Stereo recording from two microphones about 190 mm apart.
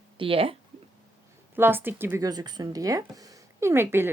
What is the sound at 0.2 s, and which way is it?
Speech, 30° right (ahead or behind).